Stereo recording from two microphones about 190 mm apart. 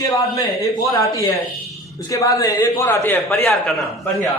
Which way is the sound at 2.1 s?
20° left (ahead or behind).